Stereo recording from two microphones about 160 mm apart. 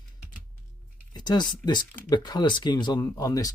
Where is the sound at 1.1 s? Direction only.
25° left (ahead or behind).